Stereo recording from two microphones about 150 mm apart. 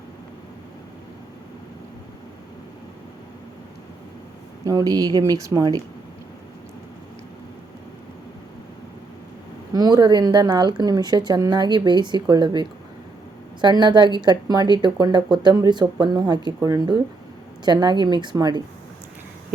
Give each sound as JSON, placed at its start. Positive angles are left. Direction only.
{"t": 4.6, "sound": "speech", "side_deg": -25}
{"t": 9.7, "sound": "speech", "side_deg": -25}